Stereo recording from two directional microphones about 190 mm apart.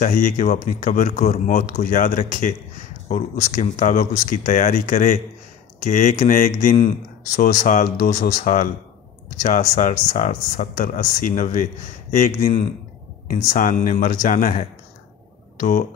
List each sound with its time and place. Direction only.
0.0 s speech: 45° left (ahead or behind)